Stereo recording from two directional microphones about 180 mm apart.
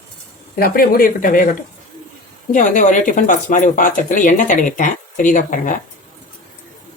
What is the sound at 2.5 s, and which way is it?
Speech, 45° left (ahead or behind).